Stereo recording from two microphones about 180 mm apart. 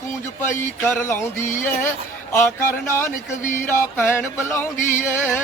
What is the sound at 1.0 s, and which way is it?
Music, 15° left (ahead or behind).